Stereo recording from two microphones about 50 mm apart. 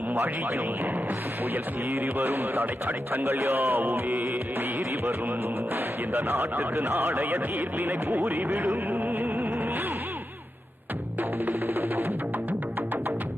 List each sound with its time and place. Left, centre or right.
0.1 s speech: right
1.9 s speech: right
5.7 s speech: right
8.9 s music: right
11.2 s music: right